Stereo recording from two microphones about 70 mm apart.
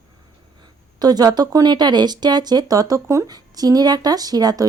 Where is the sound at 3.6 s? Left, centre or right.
Right.